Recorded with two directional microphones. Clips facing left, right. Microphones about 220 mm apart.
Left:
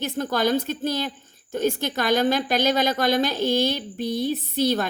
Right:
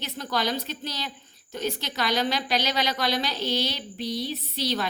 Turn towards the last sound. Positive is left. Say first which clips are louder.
# left 7 dB
turn(degrees=50)  # may be behind; listen again after turning